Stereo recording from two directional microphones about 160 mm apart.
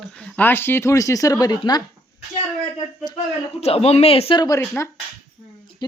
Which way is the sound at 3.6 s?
40° left (ahead or behind).